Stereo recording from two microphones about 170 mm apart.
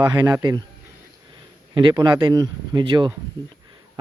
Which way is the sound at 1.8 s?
25° right (ahead or behind).